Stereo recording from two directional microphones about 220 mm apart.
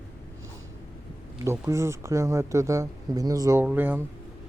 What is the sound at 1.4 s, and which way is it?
Speech, 15° right (ahead or behind).